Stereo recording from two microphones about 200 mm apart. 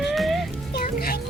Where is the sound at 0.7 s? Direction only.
50° left (ahead or behind).